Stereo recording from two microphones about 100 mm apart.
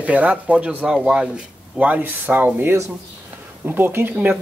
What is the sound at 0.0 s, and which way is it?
Speech, 15° right (ahead or behind).